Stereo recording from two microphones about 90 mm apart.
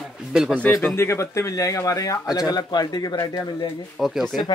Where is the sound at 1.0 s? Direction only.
30° left (ahead or behind); by 3.6 s 50° left (ahead or behind).